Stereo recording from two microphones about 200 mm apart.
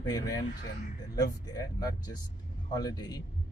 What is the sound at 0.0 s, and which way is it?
Speech, 20° left (ahead or behind).